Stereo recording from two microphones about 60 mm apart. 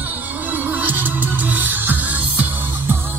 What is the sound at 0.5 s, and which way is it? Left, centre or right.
Music, right.